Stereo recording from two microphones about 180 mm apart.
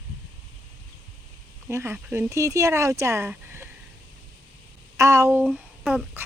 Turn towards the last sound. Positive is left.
turn(degrees=-5)  # may be behind; listen again after turning